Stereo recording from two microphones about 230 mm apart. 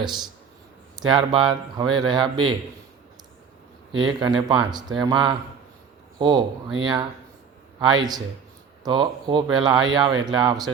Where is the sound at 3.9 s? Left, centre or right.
Centre.